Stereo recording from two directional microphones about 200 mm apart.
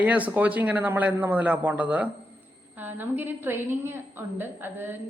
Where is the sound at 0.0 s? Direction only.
5° right (ahead or behind).